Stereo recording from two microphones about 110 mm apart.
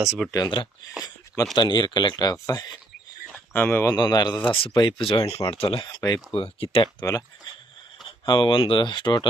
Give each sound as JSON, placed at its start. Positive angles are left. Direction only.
{"t": 0.0, "sound": "speech", "side_deg": -5}
{"t": 0.3, "sound": "speech", "side_deg": 30}
{"t": 1.5, "sound": "speech", "side_deg": 40}
{"t": 3.5, "sound": "speech", "side_deg": 20}
{"t": 3.9, "sound": "speech", "side_deg": 40}
{"t": 4.5, "sound": "speech", "side_deg": 50}
{"t": 7.0, "sound": "speech", "side_deg": 30}
{"t": 8.2, "sound": "speech", "side_deg": 45}